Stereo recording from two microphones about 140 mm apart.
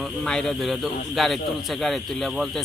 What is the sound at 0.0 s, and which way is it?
Speech, 5° left (ahead or behind).